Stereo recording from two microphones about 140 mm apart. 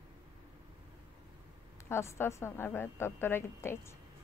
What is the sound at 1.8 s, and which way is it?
A woman's voice, 20° left (ahead or behind).